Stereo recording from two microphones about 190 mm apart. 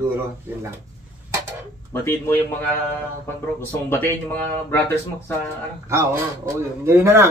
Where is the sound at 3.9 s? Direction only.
10° left (ahead or behind).